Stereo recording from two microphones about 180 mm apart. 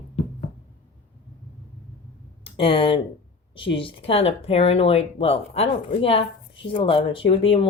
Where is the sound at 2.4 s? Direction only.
30° left (ahead or behind).